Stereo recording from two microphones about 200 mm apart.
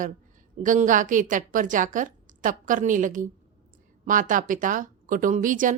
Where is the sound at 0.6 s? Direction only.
40° right (ahead or behind).